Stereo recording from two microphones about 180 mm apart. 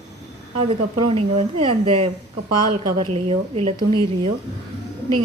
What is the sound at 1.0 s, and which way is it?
A woman's voice, 30° right (ahead or behind).